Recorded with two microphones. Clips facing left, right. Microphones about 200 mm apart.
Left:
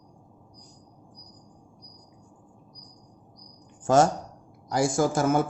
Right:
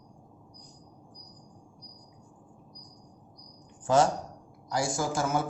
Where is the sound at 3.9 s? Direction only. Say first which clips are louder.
Left 3 dB; 45° left (ahead or behind).